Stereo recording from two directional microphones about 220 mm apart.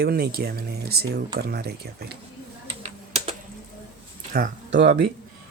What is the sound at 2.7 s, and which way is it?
Typing, 30° right (ahead or behind).